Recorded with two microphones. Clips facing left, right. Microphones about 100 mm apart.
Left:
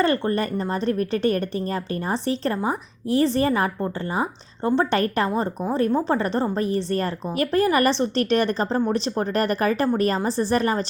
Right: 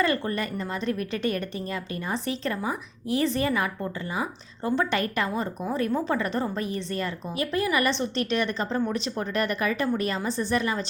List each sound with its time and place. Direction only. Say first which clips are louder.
0.0 s a woman's voice: left 4 dB; 35° left (ahead or behind)